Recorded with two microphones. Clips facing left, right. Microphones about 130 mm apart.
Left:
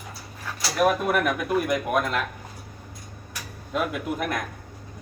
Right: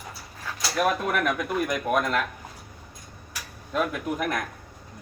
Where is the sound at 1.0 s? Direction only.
5° left (ahead or behind).